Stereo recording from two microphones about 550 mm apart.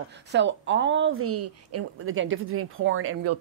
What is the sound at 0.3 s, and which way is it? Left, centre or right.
Speech, centre.